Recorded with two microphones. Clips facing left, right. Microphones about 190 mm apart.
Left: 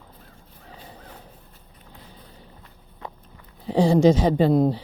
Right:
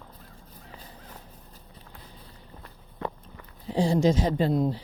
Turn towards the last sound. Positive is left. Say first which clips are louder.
# left 6 dB
turn(degrees=65)  # may be behind; listen again after turning